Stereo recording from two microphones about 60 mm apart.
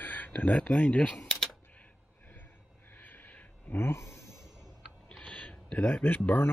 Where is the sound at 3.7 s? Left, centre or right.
Left.